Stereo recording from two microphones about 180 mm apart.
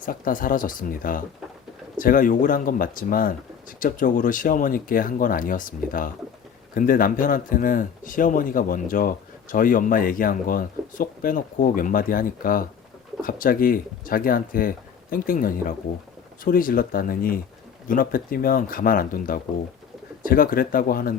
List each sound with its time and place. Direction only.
0.0 s speech: 50° left (ahead or behind)